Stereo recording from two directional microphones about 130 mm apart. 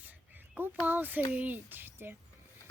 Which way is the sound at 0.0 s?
15° right (ahead or behind).